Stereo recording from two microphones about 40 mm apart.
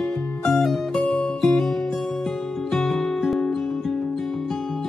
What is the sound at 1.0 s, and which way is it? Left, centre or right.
Music, centre.